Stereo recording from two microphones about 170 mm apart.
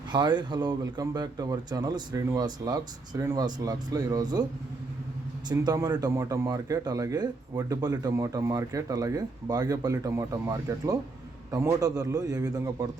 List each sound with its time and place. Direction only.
0.1 s speech: 25° right (ahead or behind)
5.5 s speech: 20° right (ahead or behind)